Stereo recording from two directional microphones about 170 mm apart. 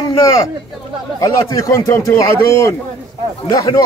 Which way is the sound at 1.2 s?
20° left (ahead or behind).